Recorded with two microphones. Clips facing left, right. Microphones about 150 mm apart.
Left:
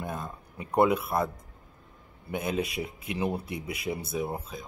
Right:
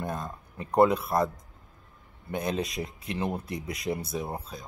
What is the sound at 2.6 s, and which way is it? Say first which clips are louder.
A man's voice: even; 10° left (ahead or behind).